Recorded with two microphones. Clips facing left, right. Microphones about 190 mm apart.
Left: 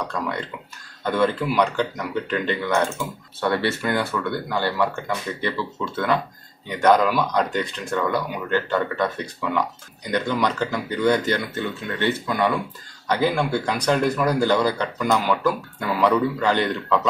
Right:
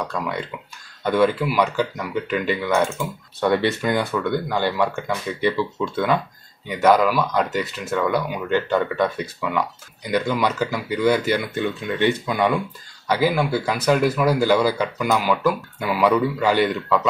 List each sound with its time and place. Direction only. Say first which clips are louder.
0.1 s speech: right 1 dB; 10° right (ahead or behind)
8.5 s speech: right 2 dB; 15° right (ahead or behind)